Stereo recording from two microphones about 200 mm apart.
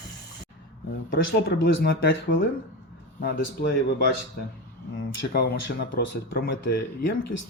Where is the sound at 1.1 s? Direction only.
50° left (ahead or behind).